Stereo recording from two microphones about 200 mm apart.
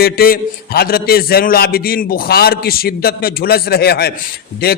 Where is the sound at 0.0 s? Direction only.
50° left (ahead or behind).